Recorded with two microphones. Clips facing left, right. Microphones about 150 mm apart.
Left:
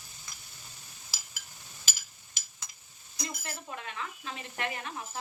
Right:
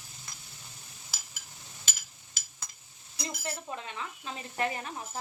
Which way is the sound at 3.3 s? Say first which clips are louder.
Right 8 dB; 30° right (ahead or behind).